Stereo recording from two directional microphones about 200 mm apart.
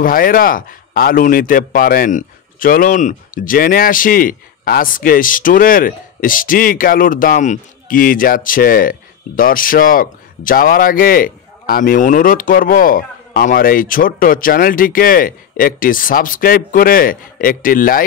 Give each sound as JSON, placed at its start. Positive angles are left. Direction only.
{"t": 0.0, "sound": "a man's voice", "side_deg": 45}